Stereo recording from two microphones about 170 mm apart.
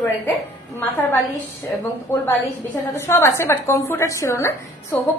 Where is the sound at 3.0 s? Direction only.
15° left (ahead or behind).